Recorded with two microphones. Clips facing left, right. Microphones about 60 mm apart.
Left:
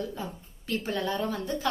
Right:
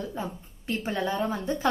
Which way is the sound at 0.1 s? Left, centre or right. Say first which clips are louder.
Right 3 dB; right.